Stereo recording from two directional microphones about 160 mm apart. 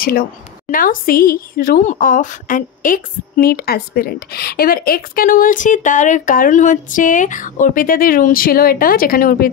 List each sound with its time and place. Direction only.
0.7 s a woman's voice: 60° left (ahead or behind)